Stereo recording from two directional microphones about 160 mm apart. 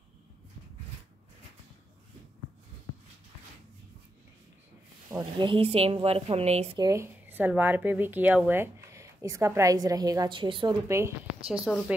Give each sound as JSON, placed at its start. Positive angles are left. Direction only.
{"t": 5.1, "sound": "speech", "side_deg": -30}
{"t": 6.8, "sound": "speech", "side_deg": -20}
{"t": 10.9, "sound": "speech", "side_deg": -20}
{"t": 11.7, "sound": "speech", "side_deg": 0}